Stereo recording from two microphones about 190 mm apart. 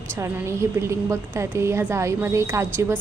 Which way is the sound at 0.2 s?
15° right (ahead or behind).